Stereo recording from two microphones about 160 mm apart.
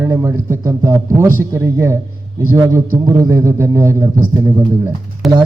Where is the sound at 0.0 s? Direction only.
15° right (ahead or behind).